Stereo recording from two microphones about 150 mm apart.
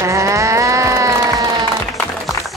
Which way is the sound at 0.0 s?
20° right (ahead or behind).